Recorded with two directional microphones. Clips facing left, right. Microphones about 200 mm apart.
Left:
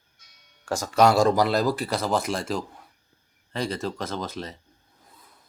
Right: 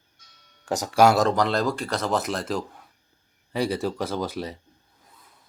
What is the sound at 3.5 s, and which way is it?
Speech, 15° right (ahead or behind).